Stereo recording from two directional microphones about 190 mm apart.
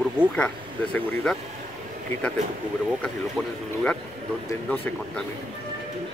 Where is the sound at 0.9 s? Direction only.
5° left (ahead or behind).